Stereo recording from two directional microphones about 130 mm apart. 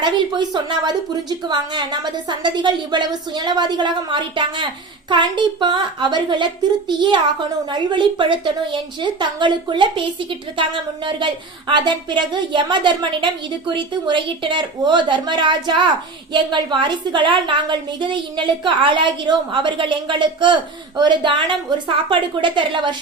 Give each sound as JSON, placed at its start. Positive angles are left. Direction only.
{"t": 0.0, "sound": "a woman's voice", "side_deg": -35}